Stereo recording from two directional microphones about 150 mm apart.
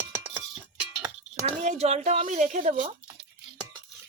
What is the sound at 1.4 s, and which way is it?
Speech, 45° right (ahead or behind).